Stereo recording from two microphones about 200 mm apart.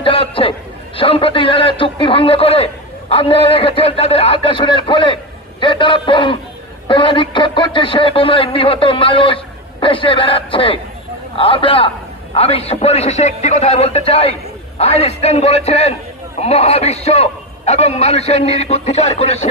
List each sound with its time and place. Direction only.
0.0 s a man's voice: 25° left (ahead or behind)